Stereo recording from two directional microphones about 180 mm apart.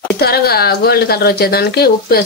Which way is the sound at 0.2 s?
60° left (ahead or behind).